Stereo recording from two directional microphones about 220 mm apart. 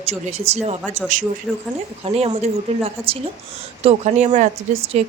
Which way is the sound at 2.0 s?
25° right (ahead or behind).